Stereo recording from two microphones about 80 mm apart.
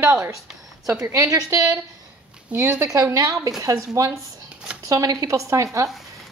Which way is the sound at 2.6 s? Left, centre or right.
Right.